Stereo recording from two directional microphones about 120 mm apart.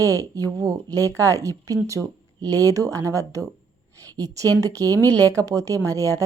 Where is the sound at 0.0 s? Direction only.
30° right (ahead or behind).